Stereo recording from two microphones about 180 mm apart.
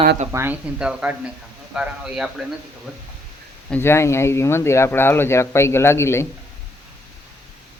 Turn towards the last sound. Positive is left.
turn(degrees=15)  # may be behind; listen again after turning